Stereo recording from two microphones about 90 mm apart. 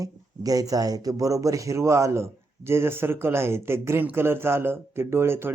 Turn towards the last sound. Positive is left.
turn(degrees=-25)  # may be behind; listen again after turning